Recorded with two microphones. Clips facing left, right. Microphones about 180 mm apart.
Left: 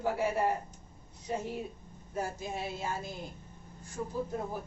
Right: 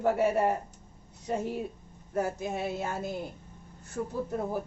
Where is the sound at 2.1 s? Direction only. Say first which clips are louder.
Right 5 dB; 60° right (ahead or behind).